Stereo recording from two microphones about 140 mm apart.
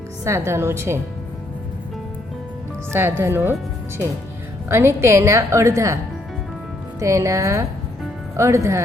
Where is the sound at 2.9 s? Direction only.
15° right (ahead or behind).